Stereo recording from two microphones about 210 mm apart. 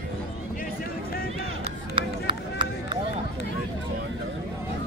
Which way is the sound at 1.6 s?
25° right (ahead or behind).